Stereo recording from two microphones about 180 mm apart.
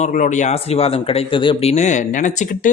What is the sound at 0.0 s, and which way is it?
Speech, 45° left (ahead or behind).